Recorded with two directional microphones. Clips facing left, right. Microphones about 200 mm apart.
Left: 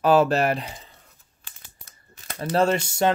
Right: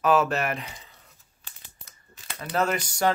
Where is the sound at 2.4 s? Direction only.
30° left (ahead or behind).